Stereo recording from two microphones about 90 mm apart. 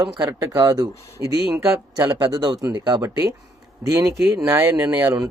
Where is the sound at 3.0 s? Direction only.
40° right (ahead or behind).